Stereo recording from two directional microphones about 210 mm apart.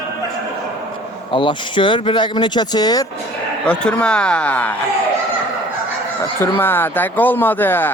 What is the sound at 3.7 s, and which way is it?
Speech, 5° left (ahead or behind).